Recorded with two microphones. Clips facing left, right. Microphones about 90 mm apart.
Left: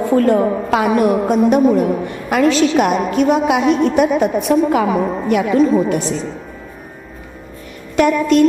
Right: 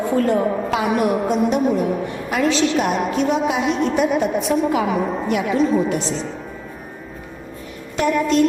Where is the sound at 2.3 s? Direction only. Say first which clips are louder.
Left 5 dB; 60° left (ahead or behind).